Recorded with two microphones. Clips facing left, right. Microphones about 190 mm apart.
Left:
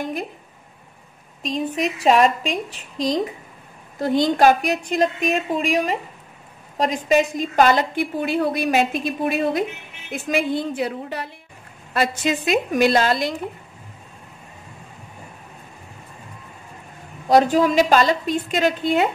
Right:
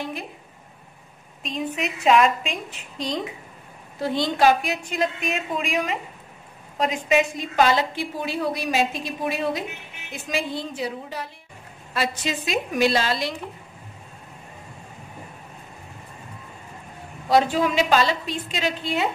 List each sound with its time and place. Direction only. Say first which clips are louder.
1.8 s a woman's voice: left 2 dB; 35° left (ahead or behind)
17.3 s a woman's voice: left 4 dB; 45° left (ahead or behind)